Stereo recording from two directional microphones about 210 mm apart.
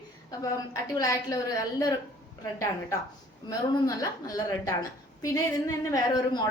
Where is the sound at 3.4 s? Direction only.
20° left (ahead or behind).